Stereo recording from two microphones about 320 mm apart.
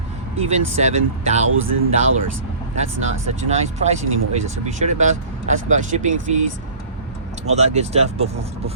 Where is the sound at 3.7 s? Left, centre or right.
Right.